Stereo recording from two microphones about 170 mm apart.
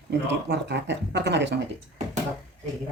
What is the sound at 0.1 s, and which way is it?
Speech, 90° right.